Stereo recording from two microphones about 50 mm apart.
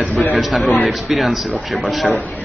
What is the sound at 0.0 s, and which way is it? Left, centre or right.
A man's voice, centre.